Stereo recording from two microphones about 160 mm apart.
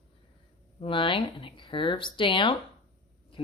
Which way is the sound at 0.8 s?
30° left (ahead or behind).